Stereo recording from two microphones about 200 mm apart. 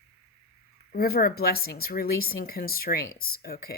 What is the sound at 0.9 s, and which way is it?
Speech, 50° left (ahead or behind).